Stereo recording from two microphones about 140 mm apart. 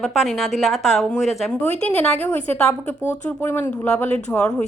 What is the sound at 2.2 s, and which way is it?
Speech, 15° left (ahead or behind).